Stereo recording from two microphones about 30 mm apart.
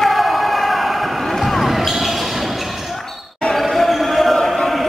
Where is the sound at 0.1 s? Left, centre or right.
Centre.